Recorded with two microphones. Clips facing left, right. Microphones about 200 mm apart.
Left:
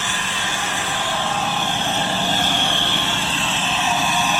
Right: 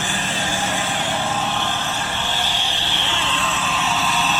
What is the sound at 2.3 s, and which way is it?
Vehicle, 50° left (ahead or behind).